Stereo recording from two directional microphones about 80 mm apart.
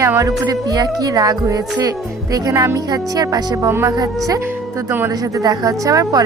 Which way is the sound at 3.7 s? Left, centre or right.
Right.